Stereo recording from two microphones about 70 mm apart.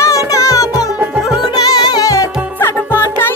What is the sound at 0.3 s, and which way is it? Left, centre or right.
Music, left.